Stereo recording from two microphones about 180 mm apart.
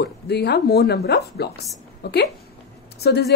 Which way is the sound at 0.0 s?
65° left (ahead or behind).